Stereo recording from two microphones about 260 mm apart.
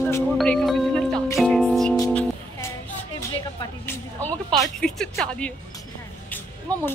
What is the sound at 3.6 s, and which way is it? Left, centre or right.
Speech, centre.